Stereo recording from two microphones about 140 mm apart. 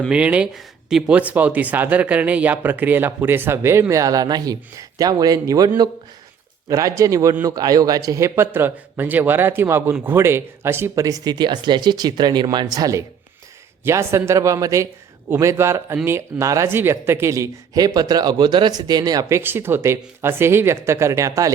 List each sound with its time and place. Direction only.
0.1 s speech: 10° right (ahead or behind); by 19.4 s 25° right (ahead or behind)
19.4 s speech: 15° right (ahead or behind)